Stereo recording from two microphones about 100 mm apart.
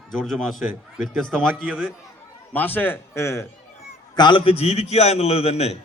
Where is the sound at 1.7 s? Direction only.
10° right (ahead or behind).